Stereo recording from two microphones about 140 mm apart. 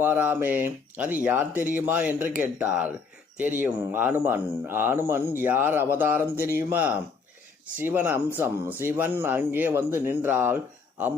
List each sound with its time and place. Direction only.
0.0 s speech: 15° right (ahead or behind)